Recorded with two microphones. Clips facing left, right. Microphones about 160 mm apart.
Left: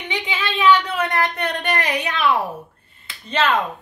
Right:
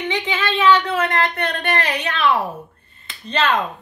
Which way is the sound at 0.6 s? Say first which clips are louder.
Even; 15° left (ahead or behind).